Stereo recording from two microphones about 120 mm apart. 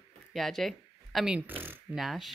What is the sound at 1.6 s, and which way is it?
Speech, 15° right (ahead or behind).